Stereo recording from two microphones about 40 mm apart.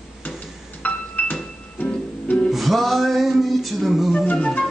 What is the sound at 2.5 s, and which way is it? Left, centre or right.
Music, centre.